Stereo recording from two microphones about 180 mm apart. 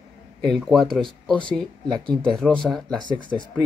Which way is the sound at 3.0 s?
25° left (ahead or behind).